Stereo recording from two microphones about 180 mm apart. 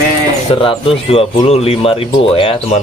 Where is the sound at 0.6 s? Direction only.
30° left (ahead or behind).